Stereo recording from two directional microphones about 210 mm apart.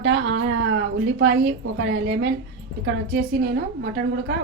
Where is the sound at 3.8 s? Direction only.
55° right (ahead or behind).